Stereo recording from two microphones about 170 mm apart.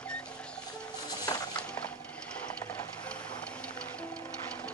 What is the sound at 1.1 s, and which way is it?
Music, 20° left (ahead or behind).